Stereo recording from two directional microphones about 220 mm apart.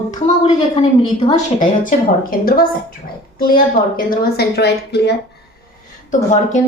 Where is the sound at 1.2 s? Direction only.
35° left (ahead or behind).